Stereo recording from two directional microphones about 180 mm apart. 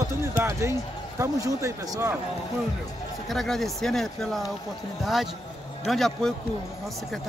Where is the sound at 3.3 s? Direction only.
Centre (ahead or behind).